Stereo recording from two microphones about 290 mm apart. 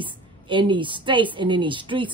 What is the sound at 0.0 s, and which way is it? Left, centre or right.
Speech, centre.